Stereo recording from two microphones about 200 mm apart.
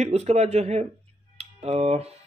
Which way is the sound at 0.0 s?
35° right (ahead or behind).